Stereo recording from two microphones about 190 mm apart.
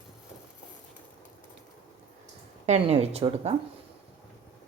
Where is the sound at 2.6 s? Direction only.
35° right (ahead or behind).